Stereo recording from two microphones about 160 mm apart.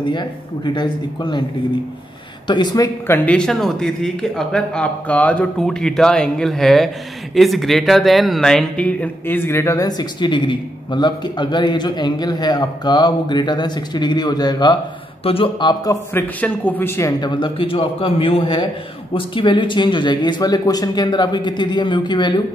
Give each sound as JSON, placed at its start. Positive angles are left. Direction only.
{"t": 0.1, "sound": "speech", "side_deg": 25}
{"t": 2.4, "sound": "speech", "side_deg": 30}
{"t": 3.2, "sound": "a man's voice", "side_deg": 5}
{"t": 15.8, "sound": "a man's voice", "side_deg": 20}
{"t": 17.2, "sound": "a man's voice", "side_deg": 30}